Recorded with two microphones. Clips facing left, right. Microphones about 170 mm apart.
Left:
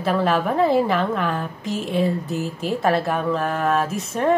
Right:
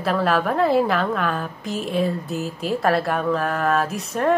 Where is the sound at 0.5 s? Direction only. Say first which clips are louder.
Left 1 dB; centre (ahead or behind).